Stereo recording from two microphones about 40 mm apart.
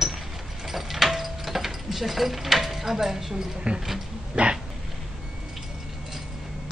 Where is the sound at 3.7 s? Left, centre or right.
Right.